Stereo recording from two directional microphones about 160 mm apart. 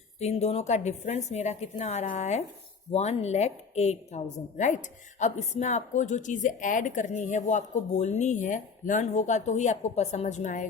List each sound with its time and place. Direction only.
0.2 s a woman's voice: 40° left (ahead or behind)